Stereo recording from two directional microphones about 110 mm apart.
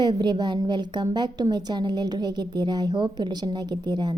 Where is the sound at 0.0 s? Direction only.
40° right (ahead or behind).